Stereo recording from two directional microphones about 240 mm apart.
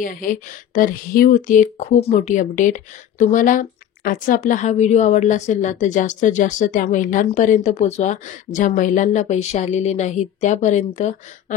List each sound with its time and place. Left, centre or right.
0.0 s a woman's voice: left